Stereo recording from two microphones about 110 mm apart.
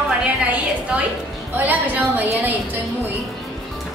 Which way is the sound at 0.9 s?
10° right (ahead or behind).